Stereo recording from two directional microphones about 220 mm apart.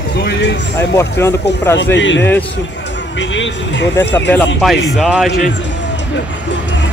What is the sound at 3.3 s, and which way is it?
Speech, 55° left (ahead or behind).